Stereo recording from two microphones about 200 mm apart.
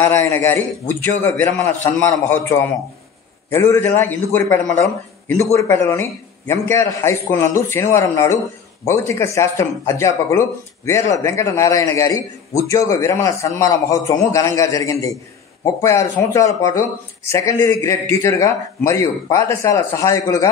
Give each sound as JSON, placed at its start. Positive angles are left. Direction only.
{"t": 0.0, "sound": "a man's voice", "side_deg": 15}